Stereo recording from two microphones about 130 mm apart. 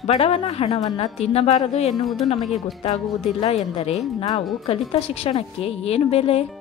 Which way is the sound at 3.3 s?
50° left (ahead or behind).